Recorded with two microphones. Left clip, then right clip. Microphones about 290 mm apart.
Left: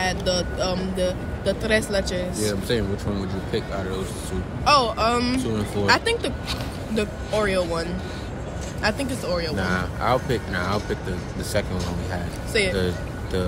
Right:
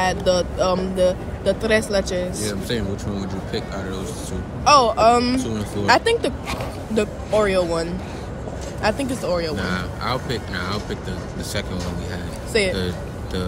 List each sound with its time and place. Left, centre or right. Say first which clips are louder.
0.0 s speech: right 5 dB; right
2.7 s speech: left 1 dB; centre
4.6 s speech: right 5 dB; centre
5.4 s speech: even; centre
5.9 s speech: right 4 dB; centre
9.6 s speech: left 1 dB; centre
12.7 s speech: left 1 dB; centre